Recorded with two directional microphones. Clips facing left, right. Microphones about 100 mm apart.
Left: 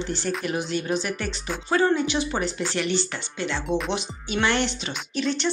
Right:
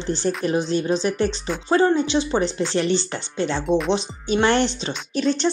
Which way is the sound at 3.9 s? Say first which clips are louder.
Right 6 dB; 35° right (ahead or behind).